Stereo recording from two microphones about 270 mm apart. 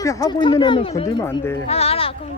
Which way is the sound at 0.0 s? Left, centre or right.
Centre.